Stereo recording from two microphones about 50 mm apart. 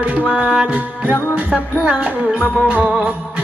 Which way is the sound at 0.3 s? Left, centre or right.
Right.